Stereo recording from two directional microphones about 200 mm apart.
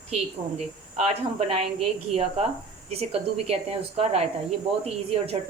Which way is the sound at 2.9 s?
30° right (ahead or behind).